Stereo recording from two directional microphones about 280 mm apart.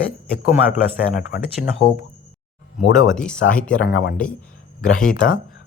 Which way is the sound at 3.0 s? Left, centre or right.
Centre.